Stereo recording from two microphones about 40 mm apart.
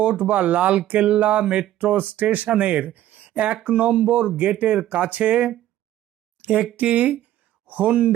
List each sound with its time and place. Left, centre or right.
0.0 s speech: right
6.4 s a sound: right
6.7 s speech: right